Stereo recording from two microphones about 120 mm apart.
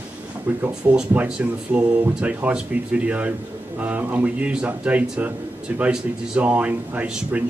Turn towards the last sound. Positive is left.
turn(degrees=-10)  # may be behind; listen again after turning